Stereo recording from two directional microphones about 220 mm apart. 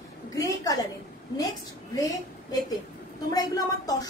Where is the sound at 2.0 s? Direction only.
15° left (ahead or behind).